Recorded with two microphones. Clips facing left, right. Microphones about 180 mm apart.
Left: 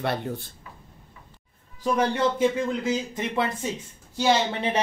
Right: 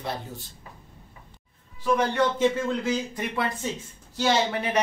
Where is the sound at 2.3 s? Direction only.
20° left (ahead or behind).